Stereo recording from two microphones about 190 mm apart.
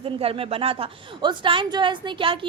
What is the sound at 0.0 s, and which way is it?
A woman's voice, 30° right (ahead or behind).